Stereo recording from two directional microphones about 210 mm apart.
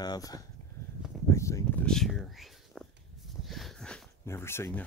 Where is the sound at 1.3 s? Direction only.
15° left (ahead or behind).